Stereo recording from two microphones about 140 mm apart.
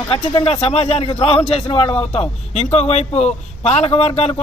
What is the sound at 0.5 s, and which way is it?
A man's voice, 45° left (ahead or behind).